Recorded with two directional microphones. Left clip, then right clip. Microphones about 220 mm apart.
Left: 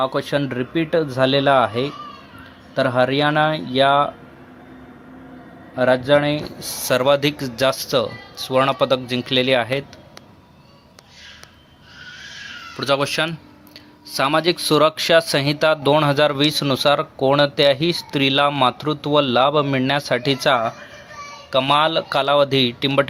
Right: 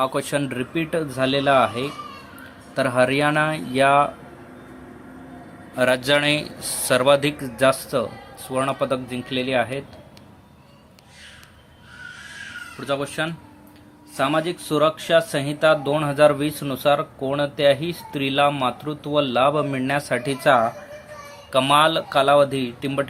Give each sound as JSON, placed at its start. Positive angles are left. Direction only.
{"t": 0.0, "sound": "speech", "side_deg": 5}
{"t": 5.7, "sound": "speech", "side_deg": 10}
{"t": 12.8, "sound": "speech", "side_deg": 25}